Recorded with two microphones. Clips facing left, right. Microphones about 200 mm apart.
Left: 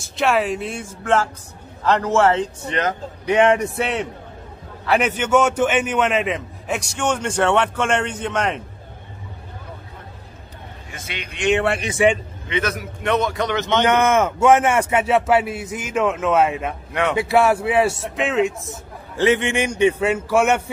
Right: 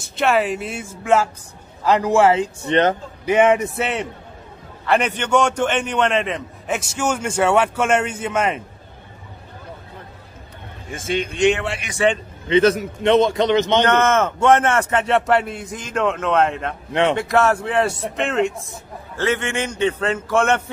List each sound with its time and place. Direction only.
0.0 s a man's voice: centre (ahead or behind)
2.7 s speech: 30° right (ahead or behind)
3.3 s a man's voice: 5° right (ahead or behind)
10.9 s a man's voice: 50° right (ahead or behind)
12.0 s a man's voice: 15° left (ahead or behind)
12.4 s a man's voice: 30° right (ahead or behind)
13.8 s a man's voice: 10° left (ahead or behind)
19.1 s a man's voice: 15° left (ahead or behind)